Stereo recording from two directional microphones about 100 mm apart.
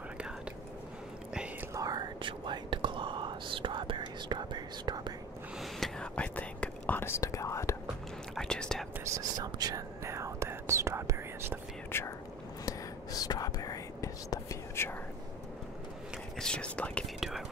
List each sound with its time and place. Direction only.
1.7 s whispering: 40° right (ahead or behind)
2.2 s whispering: 55° right (ahead or behind)
5.6 s whispering: 5° left (ahead or behind); by 7.7 s 30° left (ahead or behind)
8.4 s whispering: 5° left (ahead or behind)
9.0 s whispering: 35° right (ahead or behind)
11.9 s whispering: 25° left (ahead or behind)
12.6 s whispering: 40° left (ahead or behind)
16.3 s whispering: 10° left (ahead or behind)